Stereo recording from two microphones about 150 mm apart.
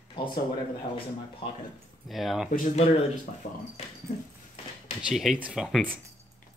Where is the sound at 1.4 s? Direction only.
40° left (ahead or behind).